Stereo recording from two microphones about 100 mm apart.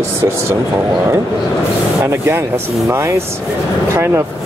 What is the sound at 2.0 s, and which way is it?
Speech, 25° right (ahead or behind).